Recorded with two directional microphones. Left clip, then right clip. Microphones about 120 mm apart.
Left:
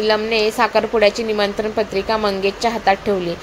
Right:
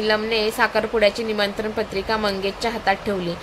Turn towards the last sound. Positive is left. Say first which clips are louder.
# left 5 dB
turn(degrees=25)  # may be behind; listen again after turning